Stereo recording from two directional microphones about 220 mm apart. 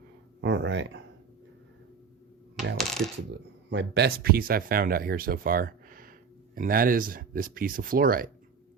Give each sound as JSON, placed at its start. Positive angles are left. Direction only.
{"t": 0.4, "sound": "a sound", "side_deg": -55}
{"t": 2.7, "sound": "coin", "side_deg": 0}
{"t": 3.7, "sound": "speech", "side_deg": -50}